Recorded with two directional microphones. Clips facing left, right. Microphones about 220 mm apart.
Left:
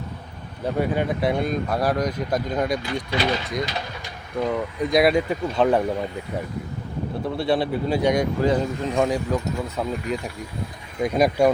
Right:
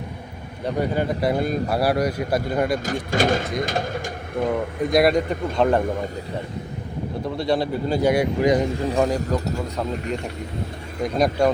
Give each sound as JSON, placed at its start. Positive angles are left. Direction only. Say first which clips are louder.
{"t": 0.6, "sound": "speech", "louder": "even", "side_deg": 0}
{"t": 2.8, "sound": "speech", "louder": "right 3 dB", "side_deg": -45}
{"t": 4.9, "sound": "speech", "louder": "even", "side_deg": 0}
{"t": 7.3, "sound": "speech", "louder": "even", "side_deg": 5}
{"t": 9.0, "sound": "speech", "louder": "left 1 dB", "side_deg": 0}